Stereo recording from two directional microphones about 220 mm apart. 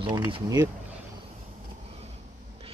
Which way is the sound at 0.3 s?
15° right (ahead or behind).